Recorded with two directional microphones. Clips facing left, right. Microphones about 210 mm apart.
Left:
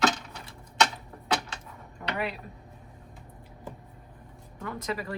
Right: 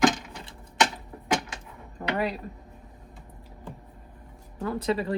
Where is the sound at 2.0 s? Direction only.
40° right (ahead or behind).